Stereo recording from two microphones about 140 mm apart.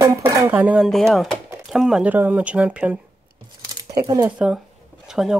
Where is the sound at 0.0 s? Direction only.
15° right (ahead or behind).